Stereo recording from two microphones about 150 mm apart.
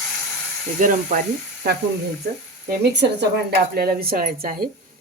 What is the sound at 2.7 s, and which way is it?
Speech, 90° right.